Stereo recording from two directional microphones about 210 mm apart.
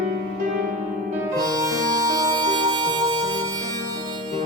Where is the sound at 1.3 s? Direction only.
15° right (ahead or behind).